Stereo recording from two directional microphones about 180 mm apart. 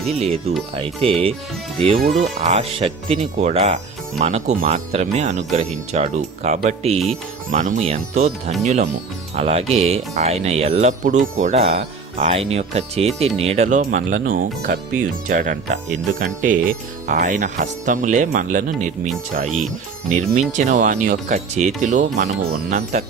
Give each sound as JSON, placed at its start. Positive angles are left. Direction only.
{"t": 0.1, "sound": "speech", "side_deg": -35}